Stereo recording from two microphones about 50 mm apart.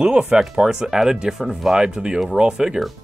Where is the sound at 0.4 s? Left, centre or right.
Centre.